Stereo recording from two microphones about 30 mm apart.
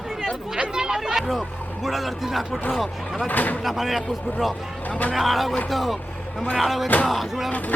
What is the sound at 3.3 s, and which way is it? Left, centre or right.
Speech, left.